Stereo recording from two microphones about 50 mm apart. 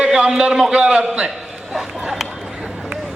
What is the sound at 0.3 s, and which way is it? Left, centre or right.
A man's voice, centre.